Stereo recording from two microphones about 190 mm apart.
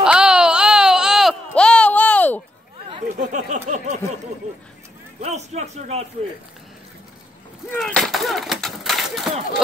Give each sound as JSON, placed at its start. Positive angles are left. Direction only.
{"t": 0.0, "sound": "baby cry", "side_deg": -5}
{"t": 3.2, "sound": "a sound", "side_deg": -40}
{"t": 5.2, "sound": "a man's voice", "side_deg": -35}
{"t": 7.7, "sound": "speech", "side_deg": 5}